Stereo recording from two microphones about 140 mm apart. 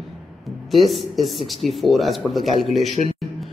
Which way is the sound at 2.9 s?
50° right (ahead or behind).